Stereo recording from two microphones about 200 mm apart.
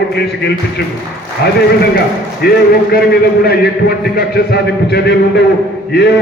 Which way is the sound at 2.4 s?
50° left (ahead or behind).